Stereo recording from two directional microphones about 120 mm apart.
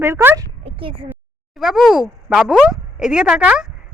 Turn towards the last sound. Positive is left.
turn(degrees=-10)  # may be behind; listen again after turning